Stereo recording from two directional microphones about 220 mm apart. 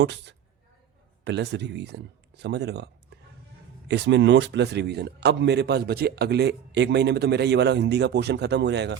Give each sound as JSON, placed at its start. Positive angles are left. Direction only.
{"t": 0.0, "sound": "a man's voice", "side_deg": -50}